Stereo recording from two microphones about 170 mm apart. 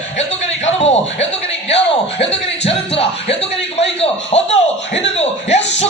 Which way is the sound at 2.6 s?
35° left (ahead or behind).